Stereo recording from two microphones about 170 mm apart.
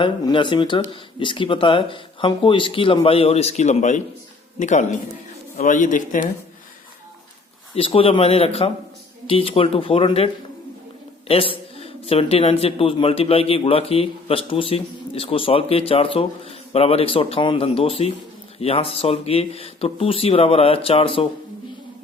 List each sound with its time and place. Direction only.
0.0 s speech: 30° left (ahead or behind); by 6.3 s 50° left (ahead or behind)
7.8 s speech: 30° left (ahead or behind)
11.8 s speech: 35° left (ahead or behind)